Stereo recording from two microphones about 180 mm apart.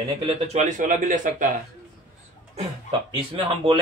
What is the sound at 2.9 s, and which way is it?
Speech, 30° right (ahead or behind).